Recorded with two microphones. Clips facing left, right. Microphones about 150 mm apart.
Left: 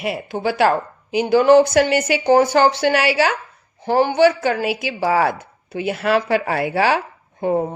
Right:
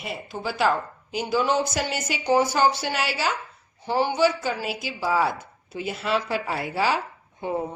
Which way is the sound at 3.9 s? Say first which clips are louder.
Left 7 dB; 55° left (ahead or behind).